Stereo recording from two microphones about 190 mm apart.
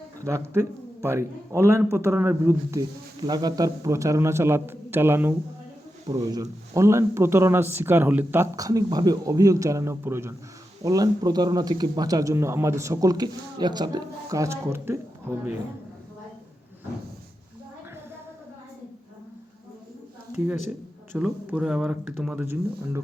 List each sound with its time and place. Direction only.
0.3 s a man's voice: 15° right (ahead or behind)
20.3 s speech: 10° right (ahead or behind)